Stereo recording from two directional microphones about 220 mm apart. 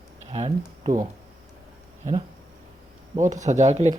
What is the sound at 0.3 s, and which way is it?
Speech, 25° right (ahead or behind).